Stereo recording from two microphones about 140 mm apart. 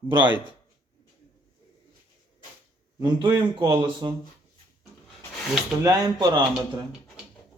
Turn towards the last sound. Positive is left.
turn(degrees=-30)  # may be behind; listen again after turning